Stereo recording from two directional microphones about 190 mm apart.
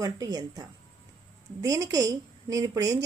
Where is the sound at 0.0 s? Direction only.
20° right (ahead or behind).